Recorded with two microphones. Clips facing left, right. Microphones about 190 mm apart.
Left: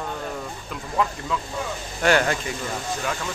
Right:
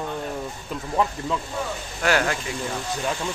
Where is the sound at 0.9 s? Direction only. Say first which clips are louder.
Right 1 dB; 25° right (ahead or behind).